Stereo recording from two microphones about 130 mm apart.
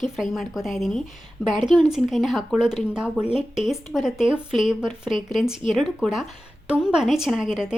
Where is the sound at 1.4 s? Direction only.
20° left (ahead or behind).